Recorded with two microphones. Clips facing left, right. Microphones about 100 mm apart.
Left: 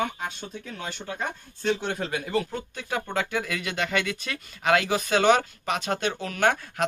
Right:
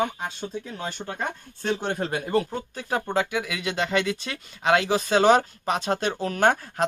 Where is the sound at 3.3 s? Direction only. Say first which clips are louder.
Even; 10° right (ahead or behind).